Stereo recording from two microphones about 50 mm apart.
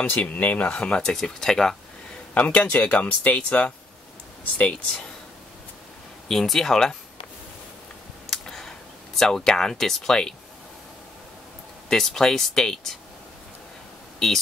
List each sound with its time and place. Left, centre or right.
0.0 s speech: left
0.7 s speech: left
2.3 s speech: left
6.2 s speech: centre
8.3 s a sound: centre
11.9 s speech: centre